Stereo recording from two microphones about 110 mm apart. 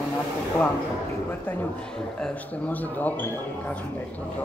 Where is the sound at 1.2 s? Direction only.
15° left (ahead or behind).